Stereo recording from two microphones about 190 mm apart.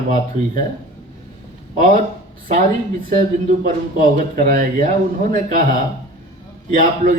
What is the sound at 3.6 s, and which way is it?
Speech, 45° right (ahead or behind).